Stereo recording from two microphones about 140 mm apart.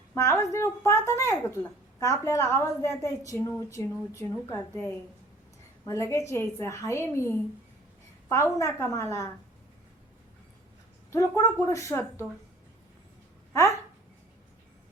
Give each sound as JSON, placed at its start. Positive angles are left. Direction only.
{"t": 0.1, "sound": "a woman's voice", "side_deg": 20}
{"t": 5.8, "sound": "a woman's voice", "side_deg": 20}
{"t": 11.1, "sound": "a woman's voice", "side_deg": 20}
{"t": 13.5, "sound": "speech", "side_deg": 20}